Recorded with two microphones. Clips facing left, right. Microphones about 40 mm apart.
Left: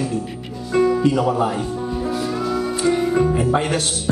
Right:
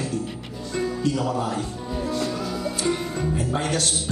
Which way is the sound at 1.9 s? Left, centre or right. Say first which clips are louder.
Left 1 dB; centre.